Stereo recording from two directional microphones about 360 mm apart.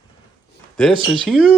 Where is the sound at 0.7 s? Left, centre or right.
Centre.